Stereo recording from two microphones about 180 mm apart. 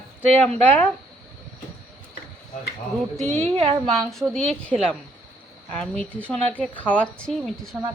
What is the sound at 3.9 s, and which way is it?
A woman's voice, centre (ahead or behind).